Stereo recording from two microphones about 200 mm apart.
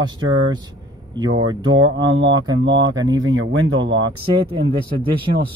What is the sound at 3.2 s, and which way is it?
Speech, 75° right (ahead or behind).